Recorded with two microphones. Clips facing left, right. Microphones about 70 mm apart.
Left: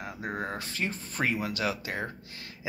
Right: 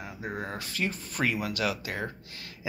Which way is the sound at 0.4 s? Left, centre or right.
Left.